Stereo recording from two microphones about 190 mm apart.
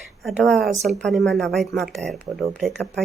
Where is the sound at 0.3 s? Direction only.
Centre (ahead or behind).